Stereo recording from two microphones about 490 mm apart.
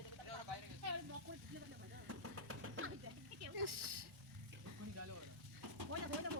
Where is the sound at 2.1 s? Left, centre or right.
Right.